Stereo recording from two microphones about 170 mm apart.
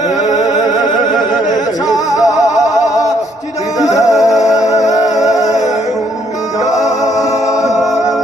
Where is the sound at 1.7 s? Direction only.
20° left (ahead or behind).